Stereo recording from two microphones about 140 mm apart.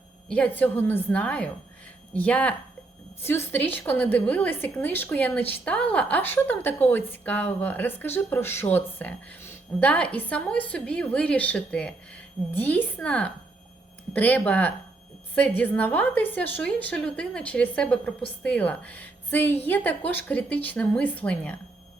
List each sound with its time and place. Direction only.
0.3 s a woman's voice: 10° left (ahead or behind)